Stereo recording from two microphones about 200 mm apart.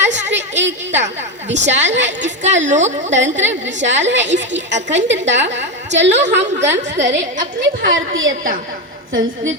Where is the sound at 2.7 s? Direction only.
35° right (ahead or behind).